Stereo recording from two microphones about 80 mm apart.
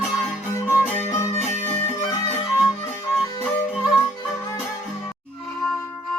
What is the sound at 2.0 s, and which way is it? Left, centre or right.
Music, left.